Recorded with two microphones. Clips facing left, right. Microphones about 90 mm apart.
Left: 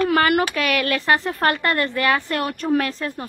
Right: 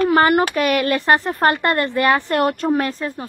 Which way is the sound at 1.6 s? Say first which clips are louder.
Right 3 dB; 20° right (ahead or behind).